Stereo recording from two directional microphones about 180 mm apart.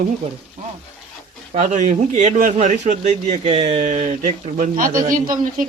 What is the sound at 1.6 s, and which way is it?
Speech, 40° right (ahead or behind).